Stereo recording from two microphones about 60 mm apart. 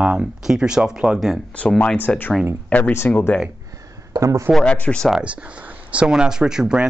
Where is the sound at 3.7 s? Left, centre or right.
Right.